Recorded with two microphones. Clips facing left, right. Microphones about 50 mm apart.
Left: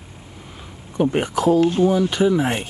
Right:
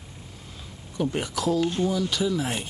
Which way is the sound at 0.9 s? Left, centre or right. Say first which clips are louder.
Left 8 dB; left.